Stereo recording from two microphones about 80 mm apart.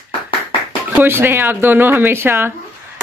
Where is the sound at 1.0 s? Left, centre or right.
Right.